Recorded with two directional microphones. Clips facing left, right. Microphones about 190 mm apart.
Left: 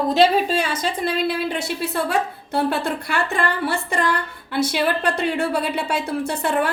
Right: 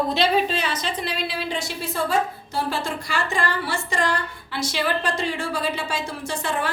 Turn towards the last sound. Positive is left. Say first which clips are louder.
# left 5 dB
turn(degrees=60)  # may be behind; listen again after turning